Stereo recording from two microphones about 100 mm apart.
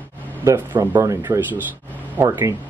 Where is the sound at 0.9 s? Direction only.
30° right (ahead or behind).